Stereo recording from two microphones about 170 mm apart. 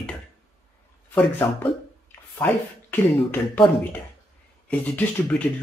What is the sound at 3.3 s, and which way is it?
Speech, 10° left (ahead or behind).